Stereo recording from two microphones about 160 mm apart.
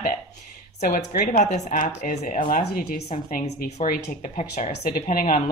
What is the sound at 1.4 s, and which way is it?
Speech, 55° left (ahead or behind).